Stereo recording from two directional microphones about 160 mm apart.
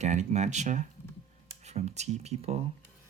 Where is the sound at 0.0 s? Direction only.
45° right (ahead or behind).